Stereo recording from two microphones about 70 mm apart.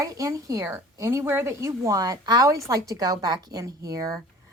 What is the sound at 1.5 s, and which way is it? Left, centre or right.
Speech, right.